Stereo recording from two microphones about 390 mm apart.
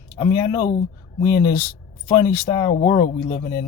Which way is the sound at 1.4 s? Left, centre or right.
Centre.